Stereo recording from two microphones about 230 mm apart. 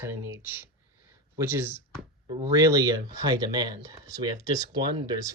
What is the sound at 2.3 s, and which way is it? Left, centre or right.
Speech, centre.